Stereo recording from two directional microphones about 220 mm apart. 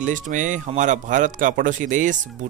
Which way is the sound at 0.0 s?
35° right (ahead or behind).